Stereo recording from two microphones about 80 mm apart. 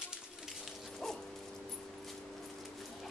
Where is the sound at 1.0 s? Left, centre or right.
Centre.